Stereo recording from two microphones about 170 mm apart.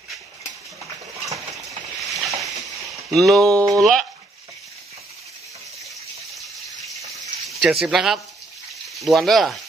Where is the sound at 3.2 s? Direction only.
Centre (ahead or behind).